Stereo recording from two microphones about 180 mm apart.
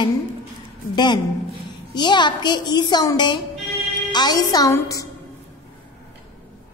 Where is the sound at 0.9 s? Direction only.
25° left (ahead or behind).